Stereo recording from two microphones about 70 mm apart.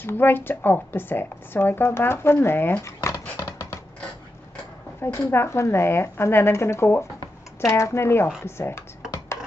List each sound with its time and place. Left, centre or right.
0.0 s speech: left
5.0 s speech: left